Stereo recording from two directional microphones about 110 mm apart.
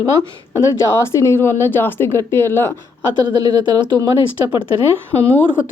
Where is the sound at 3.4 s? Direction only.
35° right (ahead or behind).